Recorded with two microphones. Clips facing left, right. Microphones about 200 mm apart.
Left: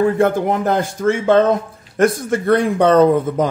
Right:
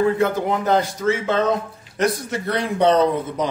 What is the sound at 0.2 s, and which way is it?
Speech, 50° left (ahead or behind).